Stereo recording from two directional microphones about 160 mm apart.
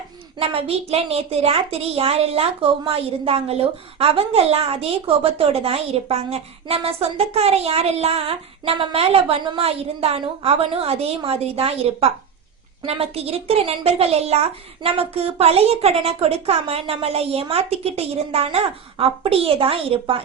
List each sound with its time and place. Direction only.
0.3 s a woman's voice: 40° right (ahead or behind)